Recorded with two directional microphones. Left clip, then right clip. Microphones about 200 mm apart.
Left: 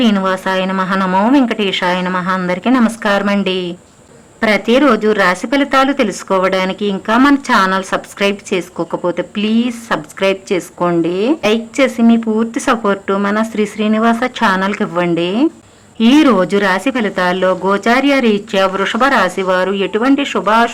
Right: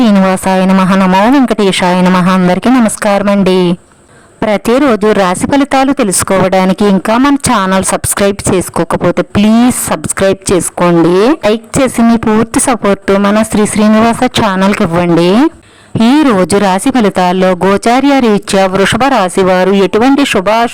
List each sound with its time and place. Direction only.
0.0 s speech: 50° right (ahead or behind)